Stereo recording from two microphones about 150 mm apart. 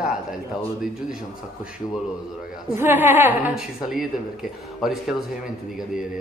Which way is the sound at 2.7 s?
15° right (ahead or behind).